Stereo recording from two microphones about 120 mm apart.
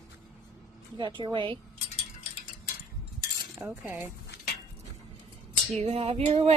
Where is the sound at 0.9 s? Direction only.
40° right (ahead or behind).